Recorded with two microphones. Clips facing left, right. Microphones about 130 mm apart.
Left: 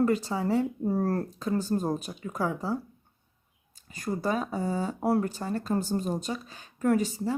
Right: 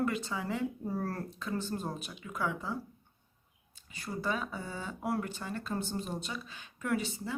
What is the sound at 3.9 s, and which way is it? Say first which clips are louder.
Speech: left 6 dB; 45° left (ahead or behind).